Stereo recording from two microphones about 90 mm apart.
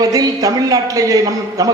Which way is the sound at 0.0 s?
40° right (ahead or behind).